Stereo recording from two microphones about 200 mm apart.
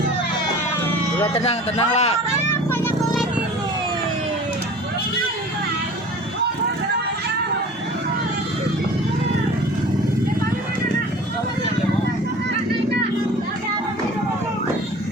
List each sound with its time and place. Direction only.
1.3 s a man's voice: 30° left (ahead or behind)
2.5 s vehicle: 10° left (ahead or behind)